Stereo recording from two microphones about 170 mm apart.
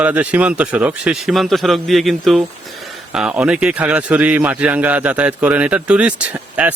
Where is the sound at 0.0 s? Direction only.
10° right (ahead or behind).